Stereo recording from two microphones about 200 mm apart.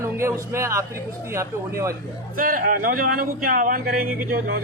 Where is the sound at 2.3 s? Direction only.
45° right (ahead or behind).